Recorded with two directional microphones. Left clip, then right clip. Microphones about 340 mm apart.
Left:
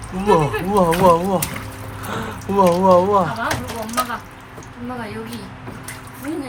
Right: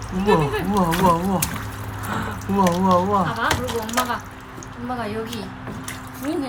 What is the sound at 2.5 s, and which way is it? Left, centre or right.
Speech, centre.